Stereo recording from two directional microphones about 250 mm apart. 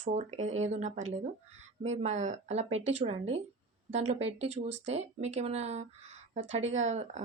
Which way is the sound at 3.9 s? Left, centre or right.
Right.